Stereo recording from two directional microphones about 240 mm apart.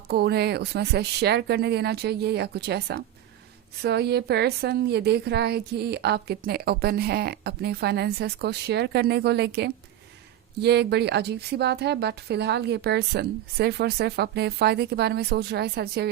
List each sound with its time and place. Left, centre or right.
0.1 s a woman's voice: right